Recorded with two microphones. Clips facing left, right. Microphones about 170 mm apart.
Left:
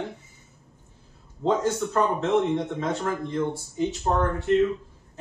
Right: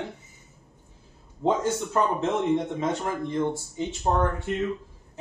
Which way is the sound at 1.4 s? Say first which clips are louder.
Left 1 dB; 15° right (ahead or behind).